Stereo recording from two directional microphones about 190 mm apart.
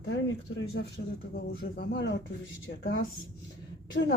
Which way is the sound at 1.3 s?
60° left (ahead or behind).